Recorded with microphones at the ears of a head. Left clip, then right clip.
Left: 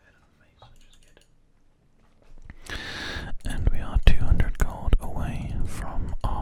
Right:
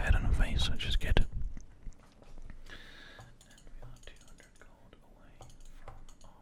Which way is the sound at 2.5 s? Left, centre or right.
Left.